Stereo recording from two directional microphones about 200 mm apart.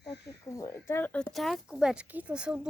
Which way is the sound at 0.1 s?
55° left (ahead or behind).